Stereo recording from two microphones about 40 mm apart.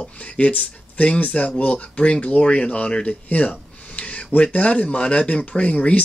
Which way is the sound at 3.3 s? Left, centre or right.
Left.